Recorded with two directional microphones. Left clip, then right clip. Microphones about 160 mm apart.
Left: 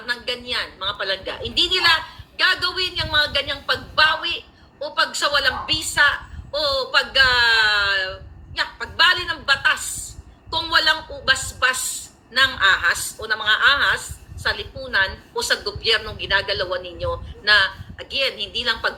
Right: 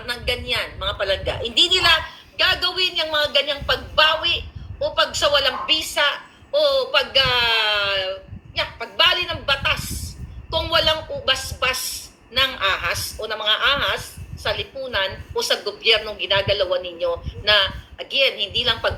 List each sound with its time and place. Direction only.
0.0 s a woman's voice: 35° left (ahead or behind)